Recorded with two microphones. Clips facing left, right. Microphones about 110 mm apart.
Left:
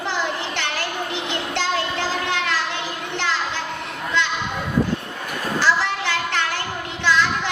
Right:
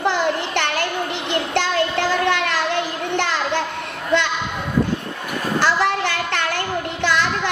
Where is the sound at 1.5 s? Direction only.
55° right (ahead or behind).